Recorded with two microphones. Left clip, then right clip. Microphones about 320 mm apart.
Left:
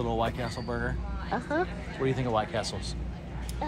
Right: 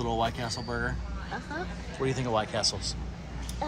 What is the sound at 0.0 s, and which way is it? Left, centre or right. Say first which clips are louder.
Speech: even; centre.